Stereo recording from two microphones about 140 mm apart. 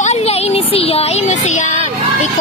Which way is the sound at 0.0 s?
50° left (ahead or behind).